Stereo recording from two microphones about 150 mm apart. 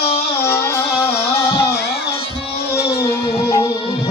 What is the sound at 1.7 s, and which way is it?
Music, 90° left.